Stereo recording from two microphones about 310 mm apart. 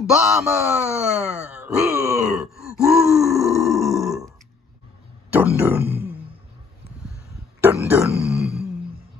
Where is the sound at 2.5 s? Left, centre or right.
Centre.